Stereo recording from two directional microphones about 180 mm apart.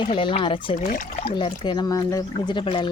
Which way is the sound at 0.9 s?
50° left (ahead or behind).